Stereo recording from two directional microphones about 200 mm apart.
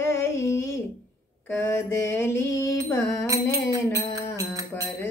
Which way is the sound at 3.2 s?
15° right (ahead or behind).